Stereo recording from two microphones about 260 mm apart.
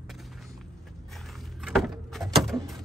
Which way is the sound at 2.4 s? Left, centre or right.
Centre.